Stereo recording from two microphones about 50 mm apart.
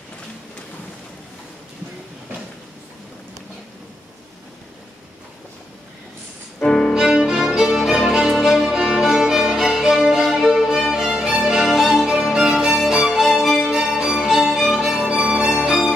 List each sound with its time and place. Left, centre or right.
6.6 s music: centre
6.9 s music: centre
10.9 s music: centre
15.0 s music: centre